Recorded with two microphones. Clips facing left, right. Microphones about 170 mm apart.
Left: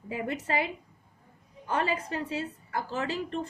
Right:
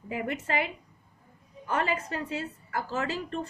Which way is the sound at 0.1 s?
30° left (ahead or behind).